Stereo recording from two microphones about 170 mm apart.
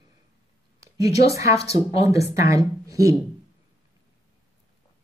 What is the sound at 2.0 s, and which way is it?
Speech, 20° right (ahead or behind).